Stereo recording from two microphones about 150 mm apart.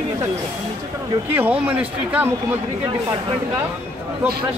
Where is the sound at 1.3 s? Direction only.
10° right (ahead or behind).